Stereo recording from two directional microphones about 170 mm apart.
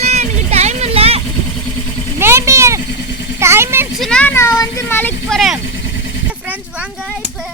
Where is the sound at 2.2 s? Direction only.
15° right (ahead or behind).